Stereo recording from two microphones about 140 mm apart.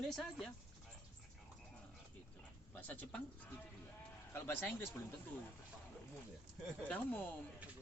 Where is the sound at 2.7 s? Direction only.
10° left (ahead or behind).